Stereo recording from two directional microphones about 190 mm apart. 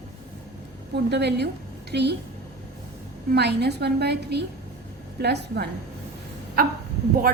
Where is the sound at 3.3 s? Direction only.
60° right (ahead or behind).